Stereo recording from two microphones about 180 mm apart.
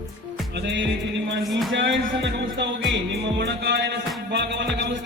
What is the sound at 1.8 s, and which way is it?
Music, 90° right.